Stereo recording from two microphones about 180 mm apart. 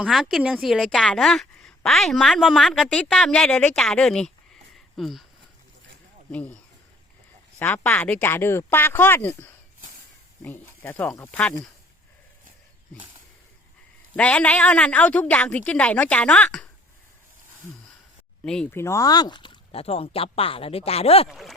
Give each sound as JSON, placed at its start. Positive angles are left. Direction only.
{"t": 0.0, "sound": "a woman's voice", "side_deg": 0}
{"t": 6.3, "sound": "a woman's voice", "side_deg": 5}
{"t": 7.6, "sound": "a woman's voice", "side_deg": 10}
{"t": 14.2, "sound": "a woman's voice", "side_deg": 5}
{"t": 18.4, "sound": "speech", "side_deg": 5}
{"t": 21.2, "sound": "a woman's voice", "side_deg": 0}